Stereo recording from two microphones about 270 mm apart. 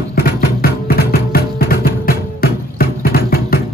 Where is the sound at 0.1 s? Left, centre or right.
Left.